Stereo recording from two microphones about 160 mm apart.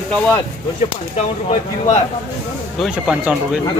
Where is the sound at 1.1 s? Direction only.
40° left (ahead or behind).